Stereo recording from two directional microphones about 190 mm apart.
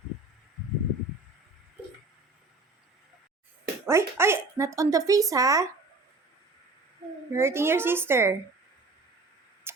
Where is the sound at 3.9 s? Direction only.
15° right (ahead or behind).